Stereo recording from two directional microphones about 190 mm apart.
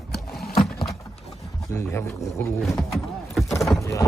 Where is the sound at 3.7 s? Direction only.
15° left (ahead or behind).